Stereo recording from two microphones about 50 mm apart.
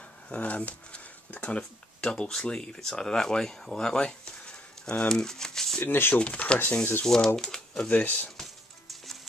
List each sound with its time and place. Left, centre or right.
0.3 s speech: left; by 5.8 s centre
5.9 s speech: left
6.1 s speech: left
6.8 s speech: left
7.3 s speech: centre
7.9 s speech: left